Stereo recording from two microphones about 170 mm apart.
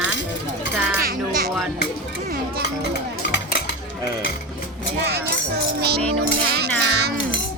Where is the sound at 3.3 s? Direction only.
75° left (ahead or behind).